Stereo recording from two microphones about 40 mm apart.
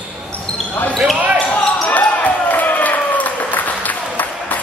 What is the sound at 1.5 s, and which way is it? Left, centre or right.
Basketball bounce, left.